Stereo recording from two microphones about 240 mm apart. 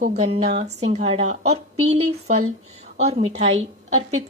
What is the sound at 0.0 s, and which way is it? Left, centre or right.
Speech, right.